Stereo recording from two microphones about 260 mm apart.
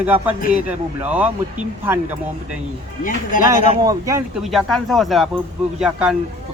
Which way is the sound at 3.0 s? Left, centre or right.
Left.